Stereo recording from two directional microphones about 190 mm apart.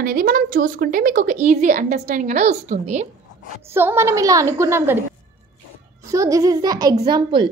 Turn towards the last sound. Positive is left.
turn(degrees=-25)  # may be behind; listen again after turning